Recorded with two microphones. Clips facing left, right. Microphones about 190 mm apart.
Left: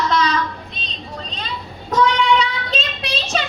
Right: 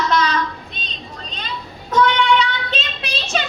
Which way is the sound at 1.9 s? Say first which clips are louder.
Even; 35° left (ahead or behind).